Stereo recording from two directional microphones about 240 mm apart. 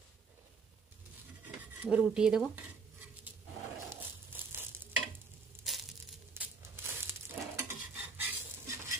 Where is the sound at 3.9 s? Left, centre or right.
Centre.